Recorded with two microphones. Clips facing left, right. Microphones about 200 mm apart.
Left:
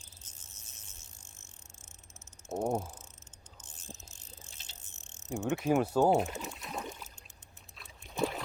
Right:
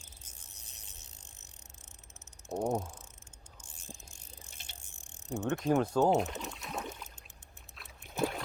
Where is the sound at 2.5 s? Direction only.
5° left (ahead or behind).